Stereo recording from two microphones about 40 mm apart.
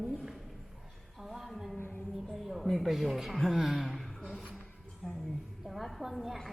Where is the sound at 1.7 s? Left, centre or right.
Left.